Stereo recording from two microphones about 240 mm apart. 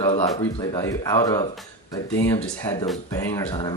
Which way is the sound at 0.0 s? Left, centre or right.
Centre.